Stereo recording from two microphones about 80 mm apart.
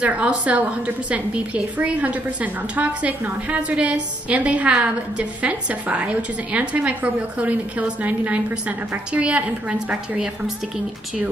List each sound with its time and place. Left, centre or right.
0.0 s a woman's voice: centre